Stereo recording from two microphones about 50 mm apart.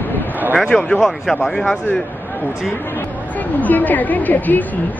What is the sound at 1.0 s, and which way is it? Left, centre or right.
Speech, centre.